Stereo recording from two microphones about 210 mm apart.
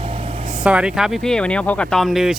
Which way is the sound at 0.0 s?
25° right (ahead or behind).